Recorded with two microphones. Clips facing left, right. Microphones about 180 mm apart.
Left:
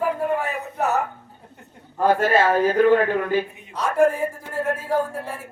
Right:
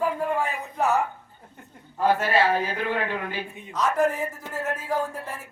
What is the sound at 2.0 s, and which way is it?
A man's voice, 50° left (ahead or behind).